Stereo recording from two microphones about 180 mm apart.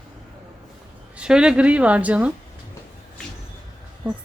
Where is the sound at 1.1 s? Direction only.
5° right (ahead or behind).